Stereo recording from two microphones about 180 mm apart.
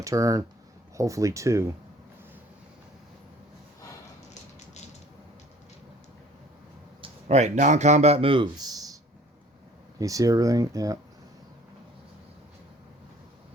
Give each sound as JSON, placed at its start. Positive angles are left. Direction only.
{"t": 0.0, "sound": "speech", "side_deg": -15}
{"t": 7.0, "sound": "a man's voice", "side_deg": -40}
{"t": 10.0, "sound": "speech", "side_deg": -20}